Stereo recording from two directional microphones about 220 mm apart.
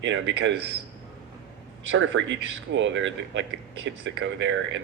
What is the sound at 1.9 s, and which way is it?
A man's voice, 55° right (ahead or behind).